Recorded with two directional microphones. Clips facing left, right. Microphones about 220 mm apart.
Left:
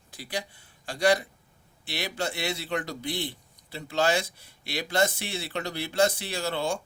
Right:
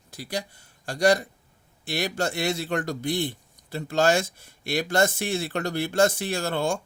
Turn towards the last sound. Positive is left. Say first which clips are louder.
# right 3 dB
turn(degrees=-50)  # may be behind; listen again after turning